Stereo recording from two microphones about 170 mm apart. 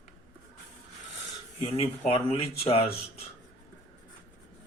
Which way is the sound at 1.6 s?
35° left (ahead or behind).